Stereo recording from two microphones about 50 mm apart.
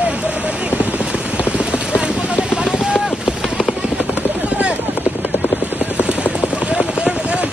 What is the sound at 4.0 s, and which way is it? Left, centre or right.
Helicopter, right.